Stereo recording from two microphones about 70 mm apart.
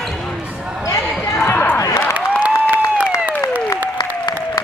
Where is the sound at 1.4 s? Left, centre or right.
Left.